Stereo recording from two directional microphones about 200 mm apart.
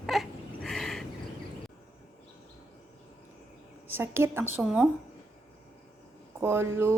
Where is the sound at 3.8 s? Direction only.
10° right (ahead or behind).